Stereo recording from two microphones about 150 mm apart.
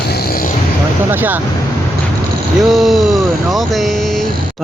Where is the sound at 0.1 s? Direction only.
90° left.